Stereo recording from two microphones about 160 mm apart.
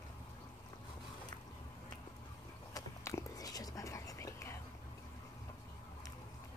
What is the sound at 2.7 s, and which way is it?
Whispering, 20° left (ahead or behind).